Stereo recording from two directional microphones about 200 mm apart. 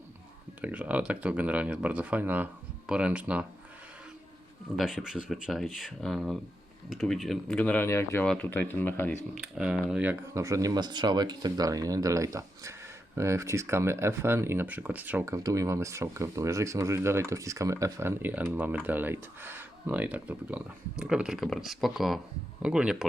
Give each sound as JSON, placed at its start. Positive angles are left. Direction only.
{"t": 0.6, "sound": "speech", "side_deg": -5}
{"t": 4.8, "sound": "speech", "side_deg": 0}
{"t": 9.3, "sound": "speech", "side_deg": -5}